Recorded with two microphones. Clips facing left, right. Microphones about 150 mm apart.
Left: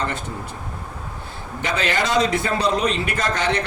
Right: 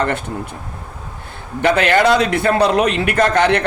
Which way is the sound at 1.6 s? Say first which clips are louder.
Right 9 dB; 60° right (ahead or behind).